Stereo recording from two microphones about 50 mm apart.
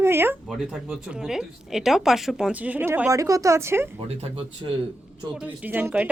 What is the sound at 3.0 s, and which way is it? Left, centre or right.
Speech, right.